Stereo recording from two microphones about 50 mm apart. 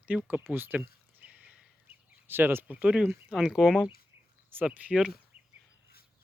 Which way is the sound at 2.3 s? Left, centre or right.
Right.